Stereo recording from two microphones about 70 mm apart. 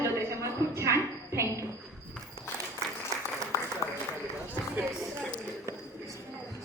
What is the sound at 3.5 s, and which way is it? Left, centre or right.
Applause, left.